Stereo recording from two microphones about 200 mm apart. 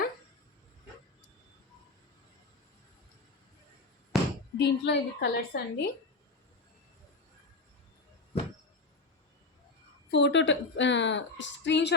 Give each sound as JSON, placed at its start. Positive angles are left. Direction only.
{"t": 4.1, "sound": "basketball bounce", "side_deg": 0}
{"t": 4.5, "sound": "a woman's voice", "side_deg": 60}
{"t": 10.1, "sound": "a woman's voice", "side_deg": 60}